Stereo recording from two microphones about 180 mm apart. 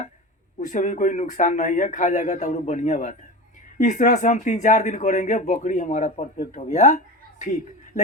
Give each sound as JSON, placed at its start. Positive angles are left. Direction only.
{"t": 0.6, "sound": "speech", "side_deg": 45}